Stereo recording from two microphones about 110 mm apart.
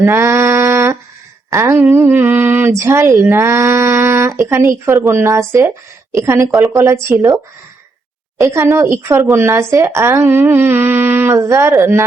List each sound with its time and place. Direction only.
0.0 s female singing: 25° right (ahead or behind)
1.5 s speech: 30° right (ahead or behind)
8.4 s speech: 25° right (ahead or behind)